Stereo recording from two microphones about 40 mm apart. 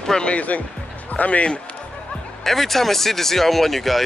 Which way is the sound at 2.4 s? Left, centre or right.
Centre.